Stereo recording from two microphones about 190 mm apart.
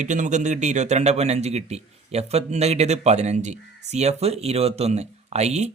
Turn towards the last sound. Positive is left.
turn(degrees=-35)  # may be behind; listen again after turning